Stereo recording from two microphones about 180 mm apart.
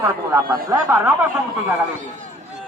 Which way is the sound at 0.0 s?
20° right (ahead or behind).